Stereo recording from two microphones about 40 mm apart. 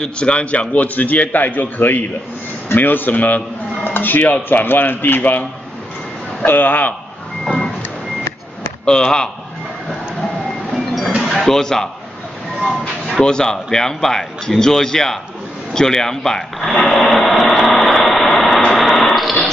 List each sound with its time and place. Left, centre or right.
0.2 s a man's voice: left
0.8 s a man's voice: left
3.9 s a man's voice: left
7.4 s reversing beeps: centre
8.8 s a man's voice: centre
11.1 s a sound: centre
11.4 s a man's voice: centre
13.2 s a man's voice: centre
16.8 s a sound: centre
17.6 s vehicle: centre
18.8 s a sound: centre